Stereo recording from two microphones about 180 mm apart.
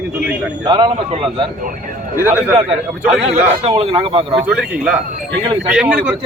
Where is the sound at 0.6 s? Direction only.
25° right (ahead or behind).